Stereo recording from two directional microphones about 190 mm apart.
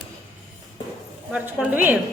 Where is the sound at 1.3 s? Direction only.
10° right (ahead or behind).